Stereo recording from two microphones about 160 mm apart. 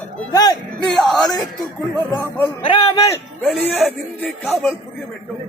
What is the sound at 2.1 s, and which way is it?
Speech, 15° left (ahead or behind).